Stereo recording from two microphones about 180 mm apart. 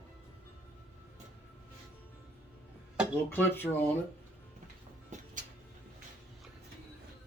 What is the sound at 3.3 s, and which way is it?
Speech, 10° left (ahead or behind).